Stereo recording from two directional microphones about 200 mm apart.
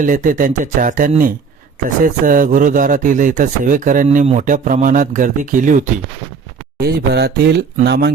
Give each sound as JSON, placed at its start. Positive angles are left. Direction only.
{"t": 0.0, "sound": "speech", "side_deg": -40}
{"t": 6.7, "sound": "speech", "side_deg": -50}